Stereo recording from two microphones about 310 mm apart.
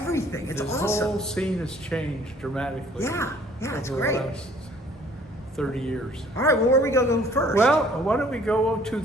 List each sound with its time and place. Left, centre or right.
0.0 s a man's voice: centre
5.5 s speech: centre